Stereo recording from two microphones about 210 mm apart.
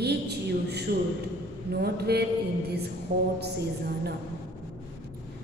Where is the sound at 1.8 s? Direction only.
50° right (ahead or behind).